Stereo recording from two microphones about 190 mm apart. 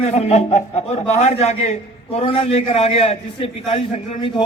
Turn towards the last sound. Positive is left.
turn(degrees=30)  # may be behind; listen again after turning